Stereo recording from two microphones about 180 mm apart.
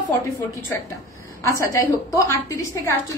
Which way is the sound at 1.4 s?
15° left (ahead or behind).